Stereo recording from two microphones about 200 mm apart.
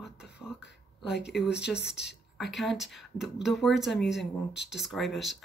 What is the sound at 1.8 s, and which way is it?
Speech, 55° left (ahead or behind).